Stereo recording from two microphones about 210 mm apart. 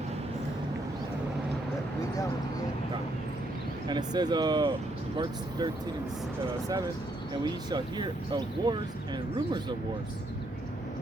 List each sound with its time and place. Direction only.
3.8 s speech: 20° right (ahead or behind)
7.4 s speech: 20° right (ahead or behind)